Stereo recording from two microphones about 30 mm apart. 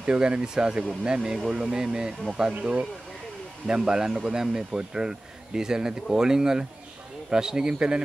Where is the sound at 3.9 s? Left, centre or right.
Right.